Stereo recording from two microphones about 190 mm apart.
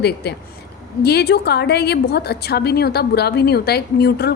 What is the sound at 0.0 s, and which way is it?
A woman's voice, 60° left (ahead or behind).